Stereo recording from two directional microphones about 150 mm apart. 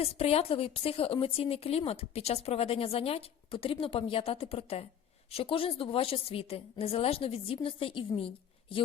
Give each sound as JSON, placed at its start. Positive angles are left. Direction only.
{"t": 0.0, "sound": "speech", "side_deg": 40}